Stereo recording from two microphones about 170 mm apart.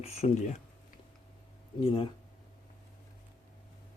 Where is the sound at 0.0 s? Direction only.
40° left (ahead or behind).